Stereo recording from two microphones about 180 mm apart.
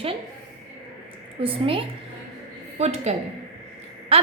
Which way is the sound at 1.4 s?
30° right (ahead or behind).